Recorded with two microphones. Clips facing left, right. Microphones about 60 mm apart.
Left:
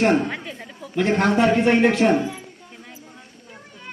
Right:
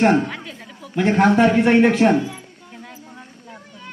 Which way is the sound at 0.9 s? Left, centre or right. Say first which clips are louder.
Right 3 dB; centre.